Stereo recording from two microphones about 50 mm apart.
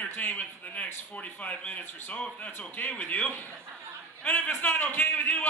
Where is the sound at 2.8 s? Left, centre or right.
Left.